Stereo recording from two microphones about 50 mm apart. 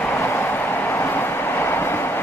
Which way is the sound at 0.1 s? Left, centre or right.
Left.